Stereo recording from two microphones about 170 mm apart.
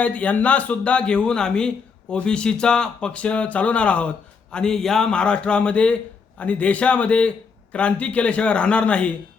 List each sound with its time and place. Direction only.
0.0 s a man's voice: 10° left (ahead or behind)